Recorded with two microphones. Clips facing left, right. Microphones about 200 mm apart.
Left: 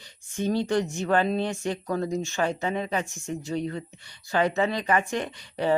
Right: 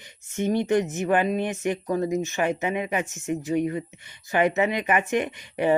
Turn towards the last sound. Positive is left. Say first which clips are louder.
# right 3 dB
turn(degrees=-15)  # may be behind; listen again after turning